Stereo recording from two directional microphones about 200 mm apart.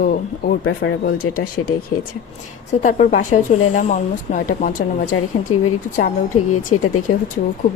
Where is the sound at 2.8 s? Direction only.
40° left (ahead or behind).